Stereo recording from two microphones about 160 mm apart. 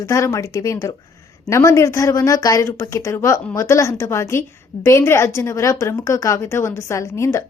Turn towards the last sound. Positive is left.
turn(degrees=15)  # may be behind; listen again after turning